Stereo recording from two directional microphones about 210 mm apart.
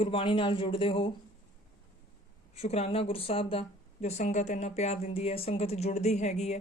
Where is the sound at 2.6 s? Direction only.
30° left (ahead or behind).